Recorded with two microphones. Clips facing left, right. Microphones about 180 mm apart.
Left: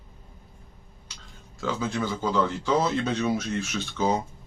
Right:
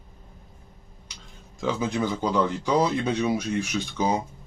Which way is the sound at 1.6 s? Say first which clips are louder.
Right 2 dB; 15° right (ahead or behind).